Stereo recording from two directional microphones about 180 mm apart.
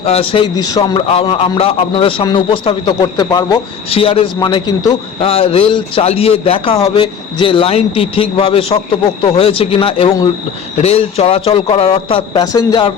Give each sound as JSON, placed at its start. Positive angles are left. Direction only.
{"t": 0.0, "sound": "a man's voice", "side_deg": 30}
{"t": 5.3, "sound": "a man's voice", "side_deg": 35}